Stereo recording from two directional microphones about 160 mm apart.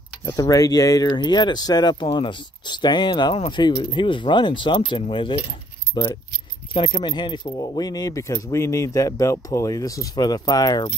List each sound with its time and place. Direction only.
0.2 s speech: 20° left (ahead or behind)